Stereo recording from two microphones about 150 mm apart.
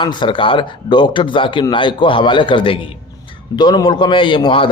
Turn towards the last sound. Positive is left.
turn(degrees=35)  # may be behind; listen again after turning